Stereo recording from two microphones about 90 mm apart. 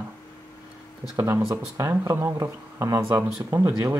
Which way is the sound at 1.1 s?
30° right (ahead or behind).